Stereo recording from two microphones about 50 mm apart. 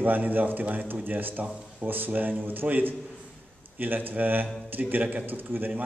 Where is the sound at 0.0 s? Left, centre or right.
Right.